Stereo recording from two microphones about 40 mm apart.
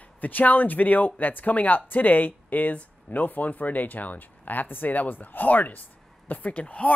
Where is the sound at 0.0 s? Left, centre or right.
Left.